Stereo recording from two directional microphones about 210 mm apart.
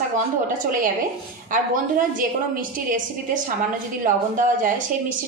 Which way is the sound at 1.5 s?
40° right (ahead or behind).